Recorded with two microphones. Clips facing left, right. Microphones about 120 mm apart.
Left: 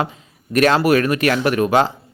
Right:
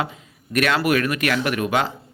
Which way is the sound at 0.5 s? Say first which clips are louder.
Left 5 dB; 35° left (ahead or behind).